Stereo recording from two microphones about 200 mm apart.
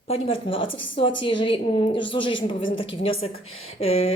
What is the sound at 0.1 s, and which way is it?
A woman's voice, 25° left (ahead or behind).